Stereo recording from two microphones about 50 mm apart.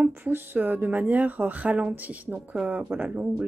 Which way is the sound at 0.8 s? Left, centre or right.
Right.